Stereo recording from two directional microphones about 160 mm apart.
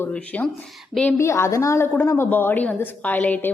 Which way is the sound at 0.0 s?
10° left (ahead or behind).